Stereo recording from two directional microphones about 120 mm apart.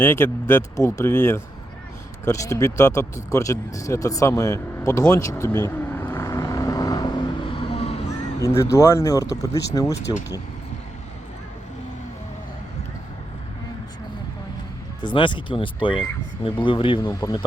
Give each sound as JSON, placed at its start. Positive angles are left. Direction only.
{"t": 0.0, "sound": "speech", "side_deg": 20}
{"t": 2.2, "sound": "a sound", "side_deg": 25}
{"t": 8.4, "sound": "speech", "side_deg": 25}
{"t": 15.0, "sound": "speech", "side_deg": 45}
{"t": 17.2, "sound": "speech", "side_deg": 30}